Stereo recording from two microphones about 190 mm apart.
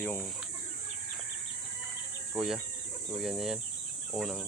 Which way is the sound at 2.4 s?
Centre (ahead or behind).